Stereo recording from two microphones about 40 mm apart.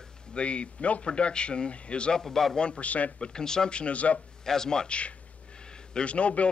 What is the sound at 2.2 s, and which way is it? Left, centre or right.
Speech, centre.